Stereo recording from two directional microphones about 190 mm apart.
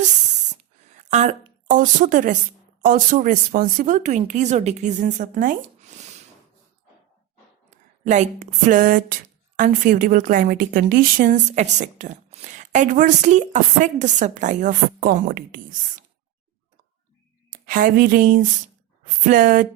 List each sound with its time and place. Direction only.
0.4 s a sound: 40° right (ahead or behind)
2.8 s a woman's voice: 45° right (ahead or behind)
8.0 s a woman's voice: 40° right (ahead or behind)
17.5 s speech: 45° right (ahead or behind)